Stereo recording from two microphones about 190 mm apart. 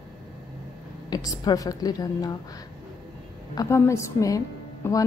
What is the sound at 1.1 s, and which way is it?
A woman's voice, 20° left (ahead or behind).